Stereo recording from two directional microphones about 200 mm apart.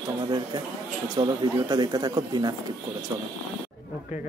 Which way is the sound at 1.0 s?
20° right (ahead or behind).